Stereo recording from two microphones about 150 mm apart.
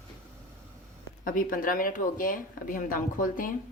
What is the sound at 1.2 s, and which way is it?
Speech, 65° left (ahead or behind).